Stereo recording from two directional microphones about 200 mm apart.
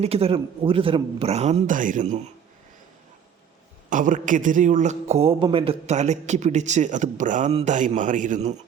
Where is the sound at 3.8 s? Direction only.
40° right (ahead or behind).